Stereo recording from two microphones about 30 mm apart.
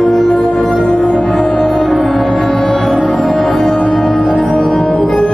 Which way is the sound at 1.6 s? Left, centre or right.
Centre.